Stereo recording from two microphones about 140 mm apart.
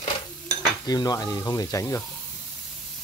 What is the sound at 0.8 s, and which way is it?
Stir, 30° left (ahead or behind).